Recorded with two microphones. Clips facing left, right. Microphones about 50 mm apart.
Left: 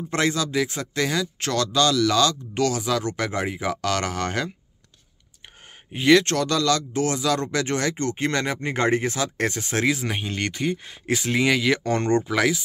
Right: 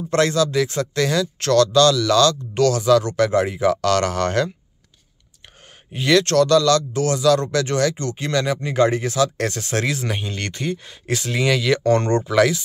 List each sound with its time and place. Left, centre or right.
0.1 s speech: centre
5.9 s speech: centre